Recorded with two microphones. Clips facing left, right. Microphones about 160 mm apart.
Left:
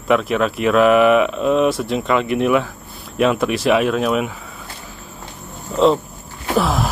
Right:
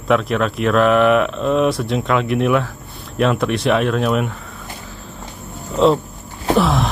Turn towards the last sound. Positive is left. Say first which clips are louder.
# right 2 dB
turn(degrees=0)  # may be behind; listen again after turning